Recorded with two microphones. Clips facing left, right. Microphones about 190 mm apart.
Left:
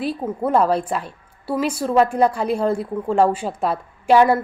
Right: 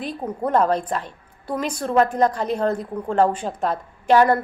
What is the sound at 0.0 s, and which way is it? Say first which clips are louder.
A woman's voice: left 3 dB; 5° left (ahead or behind).